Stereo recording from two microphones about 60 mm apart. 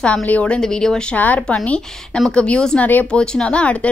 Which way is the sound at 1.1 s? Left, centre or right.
Left.